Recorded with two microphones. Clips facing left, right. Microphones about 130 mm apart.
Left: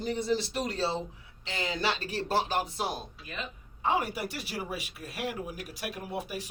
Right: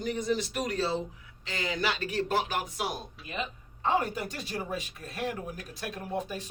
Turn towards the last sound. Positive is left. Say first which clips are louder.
# right 2 dB
turn(degrees=10)  # may be behind; listen again after turning